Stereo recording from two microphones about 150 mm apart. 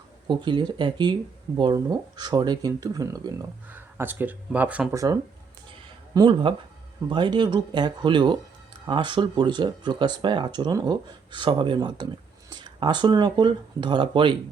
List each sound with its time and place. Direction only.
0.3 s speech: 30° right (ahead or behind)
3.7 s speech: 15° right (ahead or behind)
4.9 s speech: 20° right (ahead or behind)